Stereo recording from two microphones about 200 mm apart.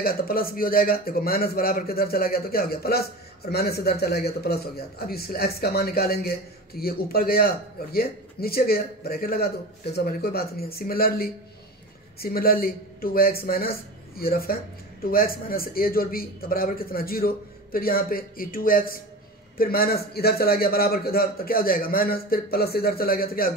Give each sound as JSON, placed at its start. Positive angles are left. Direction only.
{"t": 0.0, "sound": "a man's voice", "side_deg": 50}